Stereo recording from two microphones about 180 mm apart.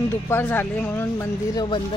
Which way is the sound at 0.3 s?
10° left (ahead or behind).